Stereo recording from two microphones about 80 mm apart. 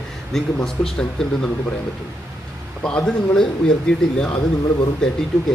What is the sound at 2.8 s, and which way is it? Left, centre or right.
Speech, centre.